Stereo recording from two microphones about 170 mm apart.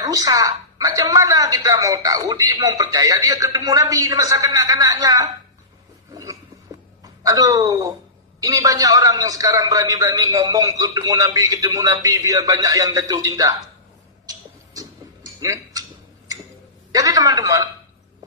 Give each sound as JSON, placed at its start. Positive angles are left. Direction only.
{"t": 0.0, "sound": "a woman's voice", "side_deg": -20}
{"t": 7.0, "sound": "a woman's voice", "side_deg": -20}
{"t": 14.2, "sound": "a sound", "side_deg": -20}
{"t": 15.4, "sound": "speech", "side_deg": -20}
{"t": 16.9, "sound": "a woman's voice", "side_deg": -20}